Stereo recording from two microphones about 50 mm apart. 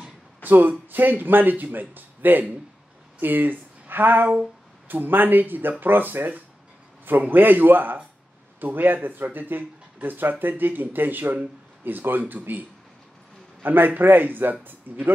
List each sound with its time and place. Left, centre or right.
0.4 s speech: right